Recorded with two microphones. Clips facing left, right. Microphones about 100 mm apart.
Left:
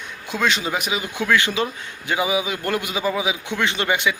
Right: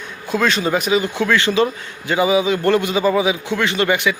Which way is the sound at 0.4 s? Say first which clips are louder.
Right 4 dB; 15° left (ahead or behind).